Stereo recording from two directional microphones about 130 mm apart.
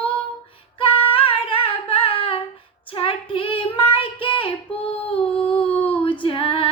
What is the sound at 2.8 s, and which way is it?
Child singing, 45° left (ahead or behind).